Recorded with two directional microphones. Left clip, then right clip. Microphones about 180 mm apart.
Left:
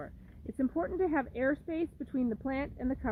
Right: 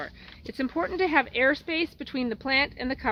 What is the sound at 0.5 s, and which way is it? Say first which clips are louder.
Speech: right 5 dB; 30° left (ahead or behind).